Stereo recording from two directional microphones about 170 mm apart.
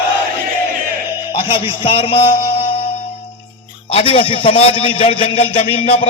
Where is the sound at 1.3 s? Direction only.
30° left (ahead or behind).